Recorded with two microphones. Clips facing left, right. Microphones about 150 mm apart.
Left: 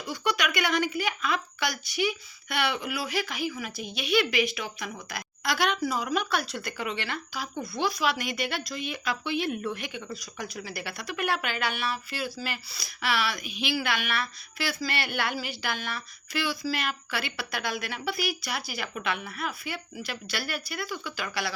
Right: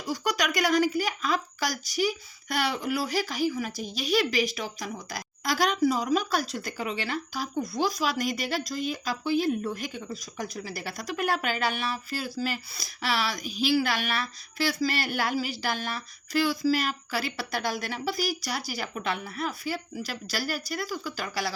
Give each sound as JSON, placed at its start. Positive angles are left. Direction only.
{"t": 0.0, "sound": "speech", "side_deg": -40}
{"t": 8.8, "sound": "speech", "side_deg": 65}
{"t": 9.2, "sound": "speech", "side_deg": -40}